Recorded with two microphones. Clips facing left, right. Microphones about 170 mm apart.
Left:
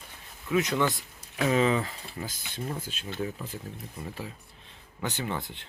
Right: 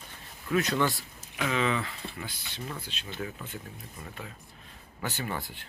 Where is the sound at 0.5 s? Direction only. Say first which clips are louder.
Left 1 dB; 20° left (ahead or behind).